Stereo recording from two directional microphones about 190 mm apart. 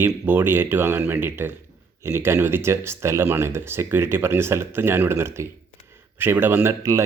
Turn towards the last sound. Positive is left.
turn(degrees=-15)  # may be behind; listen again after turning